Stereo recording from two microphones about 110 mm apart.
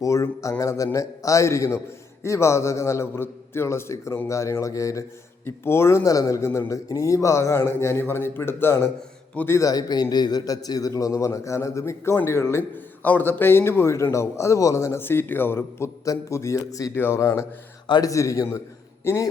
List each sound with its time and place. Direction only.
0.0 s a man's voice: 30° left (ahead or behind)
9.6 s a man's voice: 35° left (ahead or behind)